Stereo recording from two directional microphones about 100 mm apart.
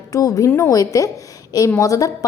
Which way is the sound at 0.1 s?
35° left (ahead or behind).